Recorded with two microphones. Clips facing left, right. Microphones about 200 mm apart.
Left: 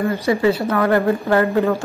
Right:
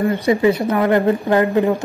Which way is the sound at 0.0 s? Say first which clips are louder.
Right 2 dB; 20° right (ahead or behind).